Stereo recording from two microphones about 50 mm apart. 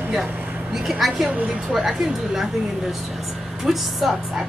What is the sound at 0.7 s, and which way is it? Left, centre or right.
Speech, centre.